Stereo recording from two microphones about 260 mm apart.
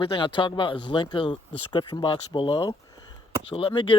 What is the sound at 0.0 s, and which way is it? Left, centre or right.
Speech, centre.